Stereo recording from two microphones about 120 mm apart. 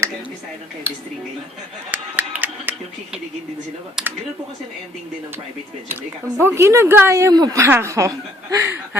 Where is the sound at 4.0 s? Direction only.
5° right (ahead or behind).